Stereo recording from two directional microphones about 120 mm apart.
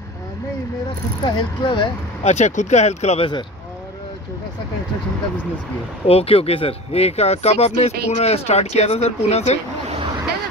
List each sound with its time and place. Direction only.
1.2 s speech: 40° left (ahead or behind)
2.2 s speech: 70° left (ahead or behind)
6.0 s speech: 55° left (ahead or behind)